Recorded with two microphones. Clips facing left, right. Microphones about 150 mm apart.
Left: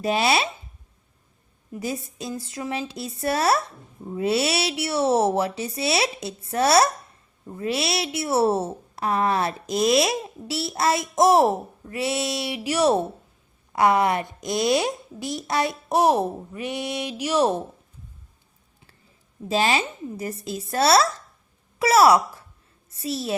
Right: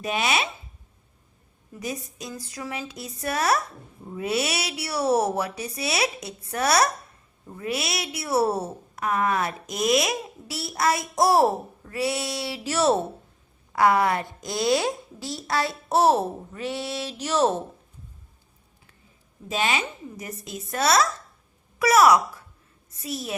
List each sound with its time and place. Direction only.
0.0 s a woman's voice: 35° left (ahead or behind)
1.7 s a woman's voice: 30° left (ahead or behind); by 17.6 s 10° left (ahead or behind)
19.5 s a woman's voice: 35° left (ahead or behind)